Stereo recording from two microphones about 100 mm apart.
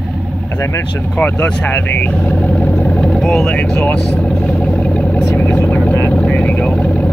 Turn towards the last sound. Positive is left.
turn(degrees=10)  # may be behind; listen again after turning